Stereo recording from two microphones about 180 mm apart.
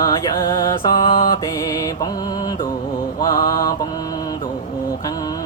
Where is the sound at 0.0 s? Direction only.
20° left (ahead or behind).